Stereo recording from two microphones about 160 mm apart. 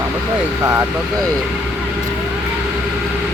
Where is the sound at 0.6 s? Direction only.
20° right (ahead or behind).